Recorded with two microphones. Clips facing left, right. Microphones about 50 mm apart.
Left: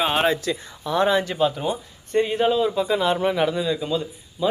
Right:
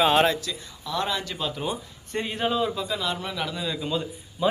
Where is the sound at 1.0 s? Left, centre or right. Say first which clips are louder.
Left 10 dB; left.